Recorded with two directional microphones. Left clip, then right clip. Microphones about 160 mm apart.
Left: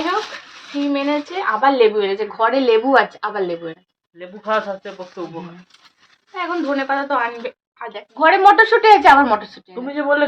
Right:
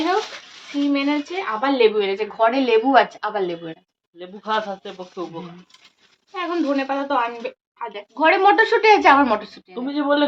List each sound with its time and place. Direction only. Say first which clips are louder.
0.9 s a woman's voice: left 2 dB; centre (ahead or behind)
2.9 s a woman's voice: left 1 dB; 15° right (ahead or behind)